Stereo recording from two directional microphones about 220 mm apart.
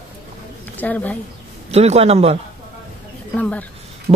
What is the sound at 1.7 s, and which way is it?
Speech, 30° right (ahead or behind).